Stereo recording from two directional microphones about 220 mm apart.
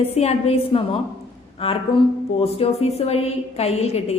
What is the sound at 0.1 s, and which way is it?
A woman's voice, 30° left (ahead or behind).